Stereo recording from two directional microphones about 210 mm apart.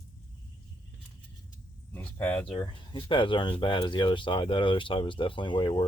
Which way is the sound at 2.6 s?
20° left (ahead or behind).